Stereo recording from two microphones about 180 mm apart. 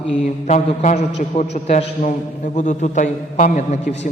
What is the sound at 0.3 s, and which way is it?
A man's voice, 40° left (ahead or behind).